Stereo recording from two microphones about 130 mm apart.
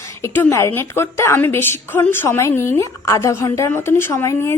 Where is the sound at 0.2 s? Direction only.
20° left (ahead or behind).